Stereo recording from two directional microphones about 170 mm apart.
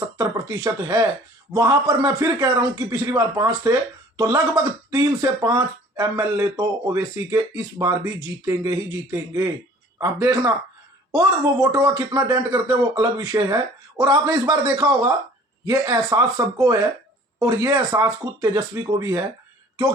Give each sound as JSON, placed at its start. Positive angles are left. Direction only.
{"t": 0.2, "sound": "speech", "side_deg": -20}